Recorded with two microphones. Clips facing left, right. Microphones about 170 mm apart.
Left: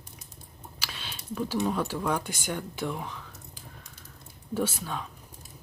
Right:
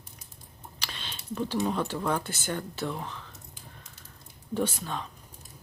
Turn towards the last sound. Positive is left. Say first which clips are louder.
# even
turn(degrees=5)  # may be behind; listen again after turning